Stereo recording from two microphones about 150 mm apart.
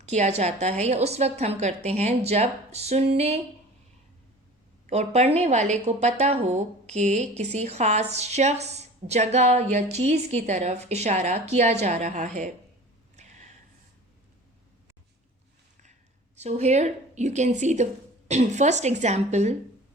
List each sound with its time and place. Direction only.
0.0 s a woman's voice: 50° right (ahead or behind)
4.9 s a woman's voice: 45° right (ahead or behind)
13.1 s a sound: 50° right (ahead or behind)
15.8 s a woman's voice: 50° right (ahead or behind)